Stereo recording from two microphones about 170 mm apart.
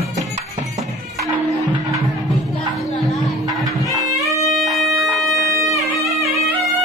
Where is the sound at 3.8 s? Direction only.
Centre (ahead or behind).